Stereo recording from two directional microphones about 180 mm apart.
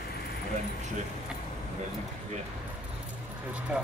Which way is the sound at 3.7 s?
5° right (ahead or behind).